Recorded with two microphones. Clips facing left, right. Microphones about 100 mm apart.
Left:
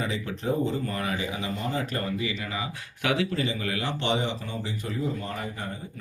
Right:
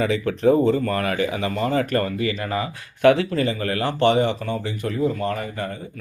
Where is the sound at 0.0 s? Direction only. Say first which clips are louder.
Right 11 dB; 75° right (ahead or behind).